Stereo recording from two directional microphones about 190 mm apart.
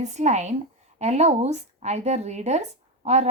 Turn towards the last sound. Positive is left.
turn(degrees=-35)  # may be behind; listen again after turning